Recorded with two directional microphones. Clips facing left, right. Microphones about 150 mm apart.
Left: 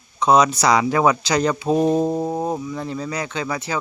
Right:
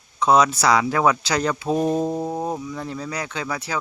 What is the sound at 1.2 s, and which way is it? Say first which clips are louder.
Speech: left 3 dB; 5° right (ahead or behind).